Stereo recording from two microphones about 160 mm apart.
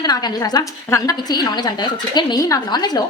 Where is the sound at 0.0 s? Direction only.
25° left (ahead or behind).